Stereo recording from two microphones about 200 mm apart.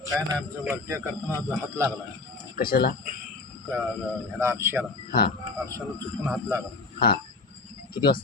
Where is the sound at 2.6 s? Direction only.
45° left (ahead or behind).